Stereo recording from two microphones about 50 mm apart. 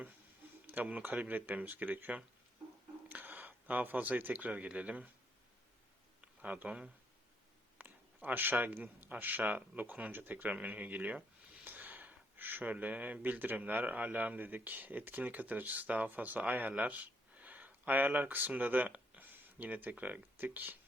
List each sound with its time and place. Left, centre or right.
0.7 s speech: right
6.2 s speech: right
7.8 s speech: right
10.1 s speech: right